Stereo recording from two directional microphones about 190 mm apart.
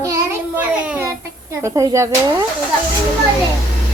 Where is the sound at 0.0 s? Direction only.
10° right (ahead or behind).